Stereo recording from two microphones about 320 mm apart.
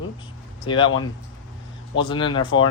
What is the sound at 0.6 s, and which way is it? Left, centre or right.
Speech, centre.